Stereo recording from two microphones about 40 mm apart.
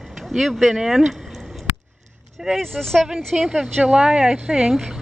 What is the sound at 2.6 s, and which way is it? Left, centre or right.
Speech, centre.